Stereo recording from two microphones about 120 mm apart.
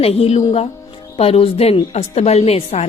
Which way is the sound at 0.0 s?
60° left (ahead or behind).